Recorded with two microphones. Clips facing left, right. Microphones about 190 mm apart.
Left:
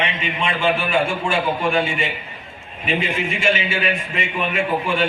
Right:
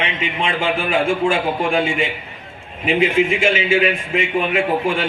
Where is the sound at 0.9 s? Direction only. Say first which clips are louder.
Right 3 dB; 90° right.